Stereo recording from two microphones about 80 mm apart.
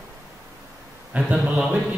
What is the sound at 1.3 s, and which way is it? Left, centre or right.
Speech, centre.